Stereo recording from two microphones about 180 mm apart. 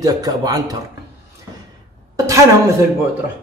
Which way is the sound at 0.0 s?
20° right (ahead or behind).